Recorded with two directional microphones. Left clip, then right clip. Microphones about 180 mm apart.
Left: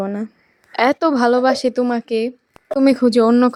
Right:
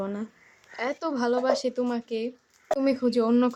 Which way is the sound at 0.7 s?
50° left (ahead or behind).